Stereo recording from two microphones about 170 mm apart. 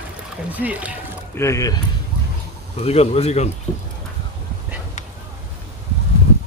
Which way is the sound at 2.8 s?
35° left (ahead or behind).